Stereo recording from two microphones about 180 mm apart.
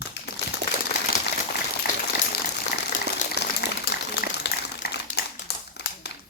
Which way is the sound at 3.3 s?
65° left (ahead or behind).